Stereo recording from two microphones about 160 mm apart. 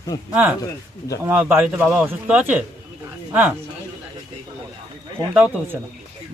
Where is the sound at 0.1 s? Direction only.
20° left (ahead or behind).